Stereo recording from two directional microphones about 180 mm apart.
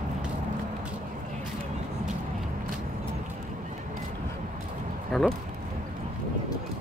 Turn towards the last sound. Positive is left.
turn(degrees=0)  # may be behind; listen again after turning